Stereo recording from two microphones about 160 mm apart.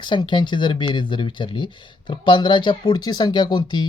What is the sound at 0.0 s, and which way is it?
Speech, 30° left (ahead or behind).